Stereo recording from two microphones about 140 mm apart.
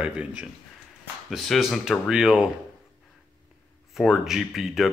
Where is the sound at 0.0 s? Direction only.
10° right (ahead or behind).